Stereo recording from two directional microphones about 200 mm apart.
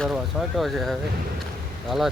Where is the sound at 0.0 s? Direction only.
Centre (ahead or behind).